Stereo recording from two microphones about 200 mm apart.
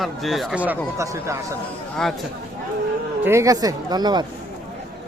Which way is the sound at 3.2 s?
15° right (ahead or behind).